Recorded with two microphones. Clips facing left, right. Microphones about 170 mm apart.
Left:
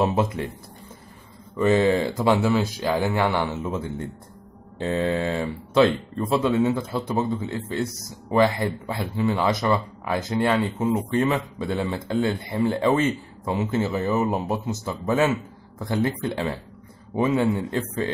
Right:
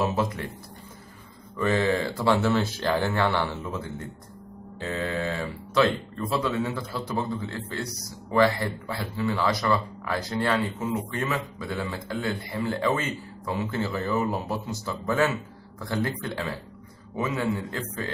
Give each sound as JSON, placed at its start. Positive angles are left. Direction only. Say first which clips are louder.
{"t": 0.0, "sound": "speech", "louder": "left 4 dB", "side_deg": 25}
{"t": 1.6, "sound": "speech", "louder": "left 5 dB", "side_deg": 20}